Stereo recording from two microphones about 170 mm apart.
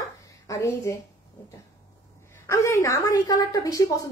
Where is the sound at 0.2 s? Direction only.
20° left (ahead or behind).